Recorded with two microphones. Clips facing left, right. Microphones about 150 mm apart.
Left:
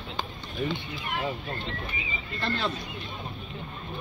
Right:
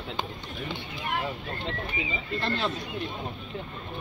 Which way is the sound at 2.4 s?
20° right (ahead or behind).